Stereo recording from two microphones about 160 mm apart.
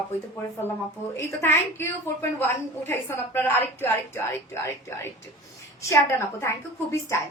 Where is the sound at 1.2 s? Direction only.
15° left (ahead or behind).